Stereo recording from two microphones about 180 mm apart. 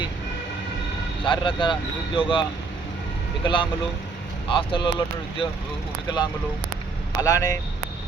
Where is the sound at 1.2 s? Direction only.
30° left (ahead or behind).